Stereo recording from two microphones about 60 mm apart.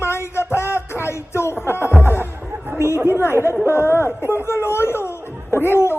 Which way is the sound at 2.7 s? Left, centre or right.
Left.